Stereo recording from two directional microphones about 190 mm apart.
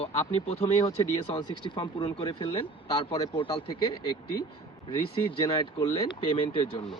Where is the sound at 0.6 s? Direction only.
20° left (ahead or behind).